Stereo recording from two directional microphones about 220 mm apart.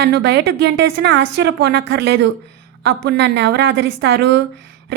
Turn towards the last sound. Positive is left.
turn(degrees=-50)  # may be behind; listen again after turning